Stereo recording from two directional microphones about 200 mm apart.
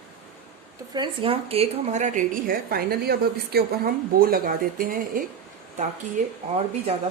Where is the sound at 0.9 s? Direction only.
25° right (ahead or behind).